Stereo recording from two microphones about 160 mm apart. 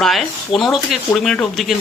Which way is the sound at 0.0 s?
Centre (ahead or behind).